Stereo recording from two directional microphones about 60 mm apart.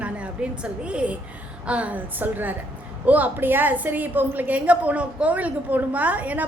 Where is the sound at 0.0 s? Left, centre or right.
Right.